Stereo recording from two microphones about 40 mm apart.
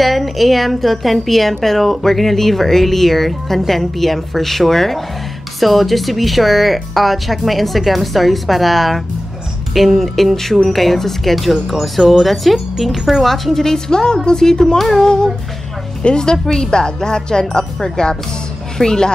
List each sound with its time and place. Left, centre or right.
0.0 s a woman's voice: centre
13.2 s speech: centre
13.8 s speech: centre
14.8 s a woman's voice: centre
15.0 s a woman's voice: centre